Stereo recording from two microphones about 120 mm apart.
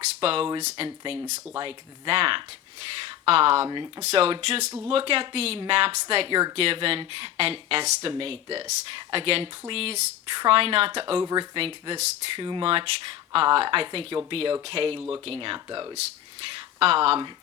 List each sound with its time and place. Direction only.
0.2 s speech: 50° right (ahead or behind)
0.6 s speech: 70° right (ahead or behind)
0.9 s speech: 50° right (ahead or behind)
3.7 s speech: 35° right (ahead or behind)
4.0 s speech: 55° right (ahead or behind)
11.2 s speech: 40° right (ahead or behind)
16.6 s speech: 55° right (ahead or behind)